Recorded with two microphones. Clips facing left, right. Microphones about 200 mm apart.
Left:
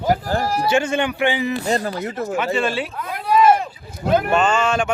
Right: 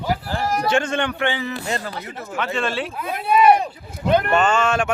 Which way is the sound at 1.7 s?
40° left (ahead or behind).